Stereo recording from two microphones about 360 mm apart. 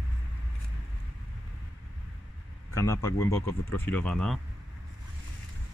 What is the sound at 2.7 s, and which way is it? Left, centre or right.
Speech, centre.